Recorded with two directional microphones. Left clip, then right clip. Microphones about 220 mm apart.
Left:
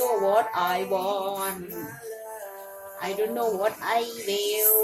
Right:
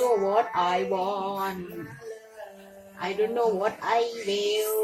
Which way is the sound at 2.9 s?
5° right (ahead or behind).